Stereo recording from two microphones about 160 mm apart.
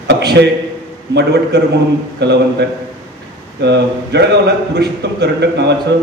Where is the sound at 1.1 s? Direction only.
90° right.